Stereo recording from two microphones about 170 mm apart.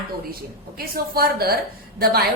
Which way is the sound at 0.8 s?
60° right (ahead or behind).